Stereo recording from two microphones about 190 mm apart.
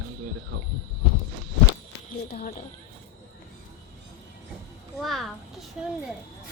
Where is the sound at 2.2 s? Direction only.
50° left (ahead or behind).